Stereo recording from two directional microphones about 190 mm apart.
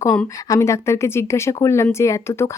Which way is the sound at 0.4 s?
15° left (ahead or behind).